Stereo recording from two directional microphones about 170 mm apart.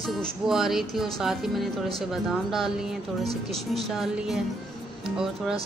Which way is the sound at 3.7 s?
Centre (ahead or behind).